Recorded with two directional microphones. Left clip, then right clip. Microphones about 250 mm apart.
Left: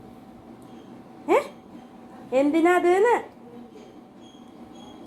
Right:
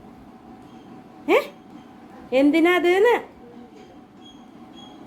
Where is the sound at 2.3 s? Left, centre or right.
Centre.